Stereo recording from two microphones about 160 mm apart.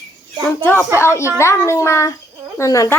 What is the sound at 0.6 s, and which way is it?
Speech, 15° left (ahead or behind).